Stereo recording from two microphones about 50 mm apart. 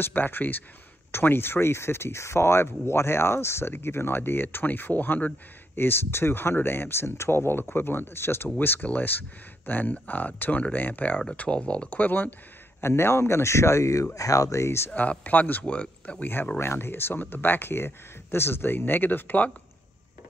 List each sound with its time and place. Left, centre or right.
0.0 s speech: left
5.8 s speech: left
8.5 s speech: left
11.3 s speech: left
11.9 s speech: left
12.8 s speech: left
14.5 s speech: left
15.0 s speech: left
16.5 s speech: left